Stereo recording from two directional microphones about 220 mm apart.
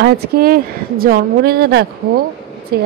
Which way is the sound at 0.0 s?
40° right (ahead or behind).